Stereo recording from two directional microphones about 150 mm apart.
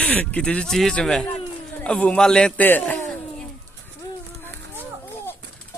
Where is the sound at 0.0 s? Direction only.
10° left (ahead or behind).